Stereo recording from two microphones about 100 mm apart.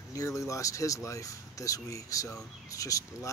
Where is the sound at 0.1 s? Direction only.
35° left (ahead or behind).